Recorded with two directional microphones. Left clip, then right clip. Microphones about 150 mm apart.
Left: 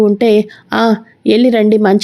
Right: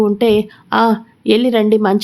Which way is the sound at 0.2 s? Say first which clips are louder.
Left 3 dB; 25° left (ahead or behind).